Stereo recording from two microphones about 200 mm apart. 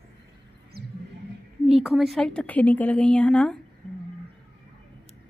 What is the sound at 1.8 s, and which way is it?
A woman's voice, centre (ahead or behind).